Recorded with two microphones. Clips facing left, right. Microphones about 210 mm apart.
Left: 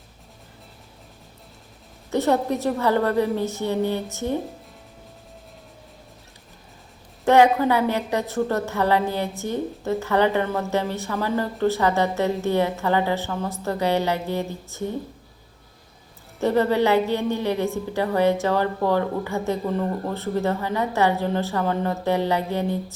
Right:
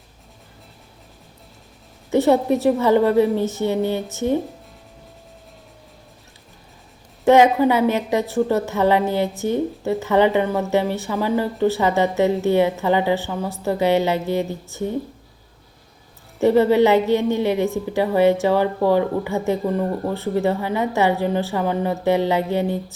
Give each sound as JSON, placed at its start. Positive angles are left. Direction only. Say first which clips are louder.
{"t": 2.0, "sound": "speech", "louder": "right 5 dB", "side_deg": -15}
{"t": 7.3, "sound": "speech", "louder": "right 3 dB", "side_deg": -15}
{"t": 16.4, "sound": "speech", "louder": "right 5 dB", "side_deg": -15}